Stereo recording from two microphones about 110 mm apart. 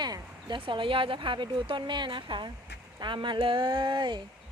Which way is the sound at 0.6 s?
50° right (ahead or behind).